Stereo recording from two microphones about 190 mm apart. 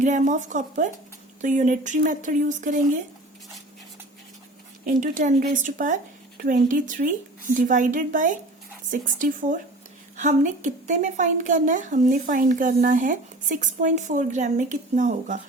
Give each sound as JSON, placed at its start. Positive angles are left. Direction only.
{"t": 0.0, "sound": "a woman's voice", "side_deg": -40}
{"t": 4.9, "sound": "a woman's voice", "side_deg": -45}